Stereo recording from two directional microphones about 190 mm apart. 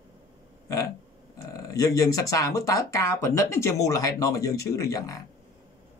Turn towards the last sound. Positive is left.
turn(degrees=15)  # may be behind; listen again after turning